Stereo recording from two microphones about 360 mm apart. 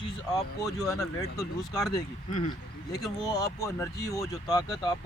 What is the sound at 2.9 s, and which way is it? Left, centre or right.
Speech, centre.